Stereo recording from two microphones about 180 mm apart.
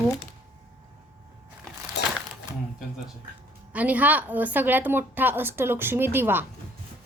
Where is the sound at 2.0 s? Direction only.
70° left (ahead or behind).